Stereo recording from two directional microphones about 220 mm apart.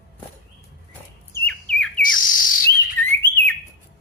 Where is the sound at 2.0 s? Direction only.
40° left (ahead or behind).